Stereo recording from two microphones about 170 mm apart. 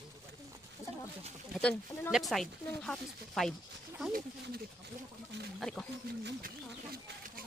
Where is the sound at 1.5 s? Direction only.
5° left (ahead or behind).